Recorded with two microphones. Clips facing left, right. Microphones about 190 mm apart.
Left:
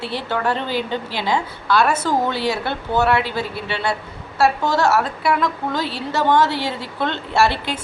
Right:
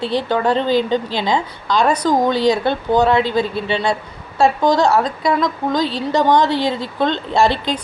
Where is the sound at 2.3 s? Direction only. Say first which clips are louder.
Right 7 dB; 10° left (ahead or behind).